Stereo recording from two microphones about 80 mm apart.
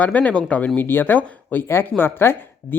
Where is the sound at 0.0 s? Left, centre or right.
Centre.